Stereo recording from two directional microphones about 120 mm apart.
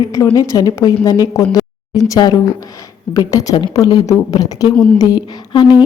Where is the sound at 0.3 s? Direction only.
30° left (ahead or behind).